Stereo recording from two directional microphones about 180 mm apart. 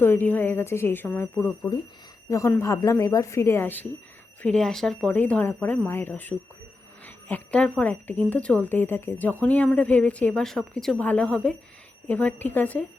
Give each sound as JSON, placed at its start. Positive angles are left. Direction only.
{"t": 0.0, "sound": "speech", "side_deg": 10}